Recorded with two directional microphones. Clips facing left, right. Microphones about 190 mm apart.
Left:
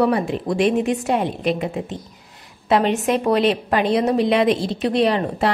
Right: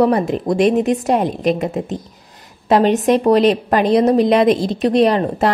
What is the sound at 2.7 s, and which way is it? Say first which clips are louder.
A woman's voice: right 5 dB; 40° right (ahead or behind).